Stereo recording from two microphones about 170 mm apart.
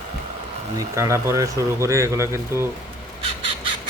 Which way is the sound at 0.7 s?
20° right (ahead or behind).